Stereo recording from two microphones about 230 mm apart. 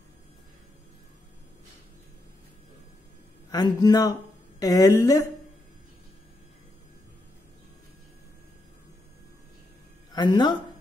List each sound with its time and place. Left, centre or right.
3.5 s speech: centre
10.1 s a man's voice: centre